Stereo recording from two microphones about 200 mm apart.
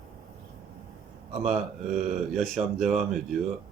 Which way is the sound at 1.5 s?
35° right (ahead or behind).